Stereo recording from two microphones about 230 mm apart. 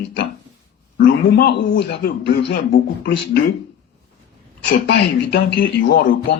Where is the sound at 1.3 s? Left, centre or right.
Left.